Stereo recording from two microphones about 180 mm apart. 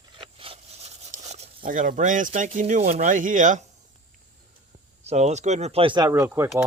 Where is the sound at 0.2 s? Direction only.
30° right (ahead or behind).